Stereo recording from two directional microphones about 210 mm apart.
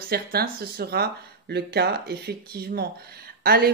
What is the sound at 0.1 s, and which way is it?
A woman's voice, 50° right (ahead or behind).